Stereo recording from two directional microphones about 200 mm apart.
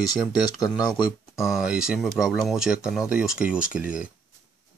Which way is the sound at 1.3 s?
Centre (ahead or behind).